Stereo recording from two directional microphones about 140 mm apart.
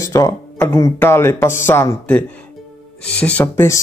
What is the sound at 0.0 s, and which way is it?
Speech, 25° left (ahead or behind).